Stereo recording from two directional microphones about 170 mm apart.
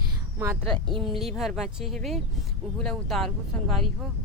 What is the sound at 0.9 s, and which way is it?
Speech, centre (ahead or behind).